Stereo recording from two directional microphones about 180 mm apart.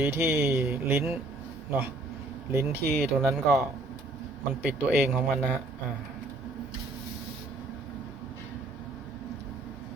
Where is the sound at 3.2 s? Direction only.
Centre (ahead or behind).